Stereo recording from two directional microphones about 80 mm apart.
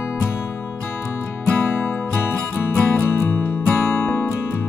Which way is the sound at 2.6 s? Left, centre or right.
Left.